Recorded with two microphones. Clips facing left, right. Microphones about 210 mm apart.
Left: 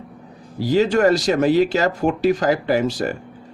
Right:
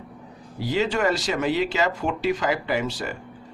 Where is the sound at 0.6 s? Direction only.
40° left (ahead or behind).